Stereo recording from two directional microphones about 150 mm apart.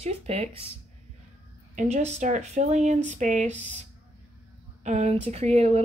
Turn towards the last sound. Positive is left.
turn(degrees=-45)  # may be behind; listen again after turning